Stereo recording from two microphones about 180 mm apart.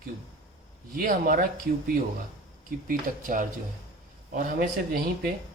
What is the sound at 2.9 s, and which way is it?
A man's voice, 50° right (ahead or behind).